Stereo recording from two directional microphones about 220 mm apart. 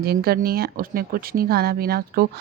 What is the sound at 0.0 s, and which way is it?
Speech, 45° right (ahead or behind).